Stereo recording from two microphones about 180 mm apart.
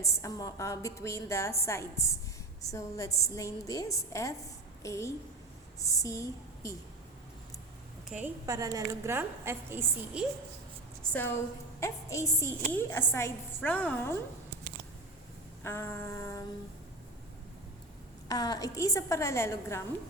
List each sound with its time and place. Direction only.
0.0 s a woman's voice: 15° left (ahead or behind)
8.4 s a woman's voice: 20° right (ahead or behind)
11.0 s a sound: 10° left (ahead or behind)
11.8 s a woman's voice: 15° left (ahead or behind)
15.6 s a woman's voice: 15° left (ahead or behind)
18.3 s a woman's voice: 20° left (ahead or behind)